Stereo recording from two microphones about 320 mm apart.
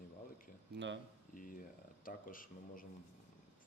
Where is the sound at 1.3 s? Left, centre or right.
Left.